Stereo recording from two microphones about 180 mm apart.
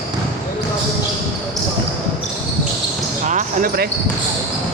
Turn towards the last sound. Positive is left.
turn(degrees=-55)  # may be behind; listen again after turning